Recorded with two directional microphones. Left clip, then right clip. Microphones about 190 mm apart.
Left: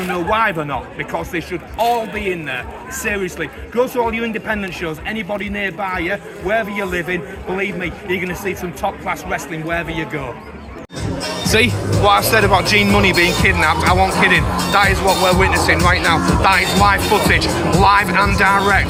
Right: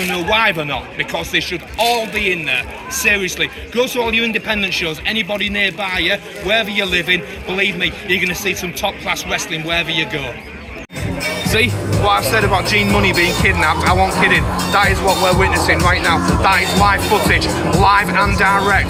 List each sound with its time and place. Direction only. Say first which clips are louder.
0.3 s a man's voice: right 2 dB; 10° right (ahead or behind)
12.0 s speech: left 2 dB; 55° left (ahead or behind)